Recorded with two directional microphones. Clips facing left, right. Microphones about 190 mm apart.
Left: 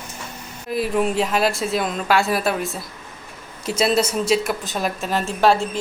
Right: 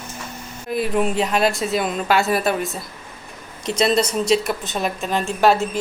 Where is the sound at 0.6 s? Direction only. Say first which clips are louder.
Even; centre (ahead or behind).